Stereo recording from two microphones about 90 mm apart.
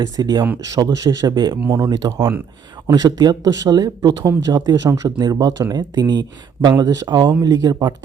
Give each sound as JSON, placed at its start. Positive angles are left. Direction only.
{"t": 0.0, "sound": "speech", "side_deg": -50}